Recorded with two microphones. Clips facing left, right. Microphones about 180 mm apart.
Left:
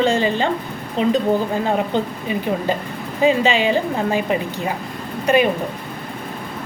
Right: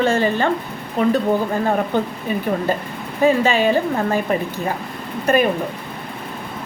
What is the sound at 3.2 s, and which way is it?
A woman's voice, 15° left (ahead or behind).